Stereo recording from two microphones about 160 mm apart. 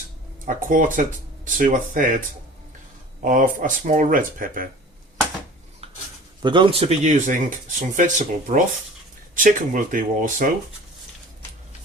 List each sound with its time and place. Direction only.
0.4 s speech: 55° right (ahead or behind)
3.2 s speech: 55° right (ahead or behind)
6.4 s speech: 30° right (ahead or behind); by 10.5 s 55° right (ahead or behind)